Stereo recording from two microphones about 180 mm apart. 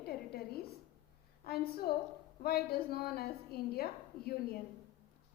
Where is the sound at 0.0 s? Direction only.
60° left (ahead or behind).